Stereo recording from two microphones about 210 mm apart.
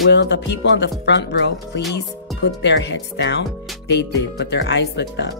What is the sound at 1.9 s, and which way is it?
Speech, 55° left (ahead or behind).